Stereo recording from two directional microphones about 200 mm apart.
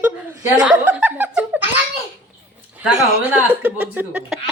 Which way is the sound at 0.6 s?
5° right (ahead or behind).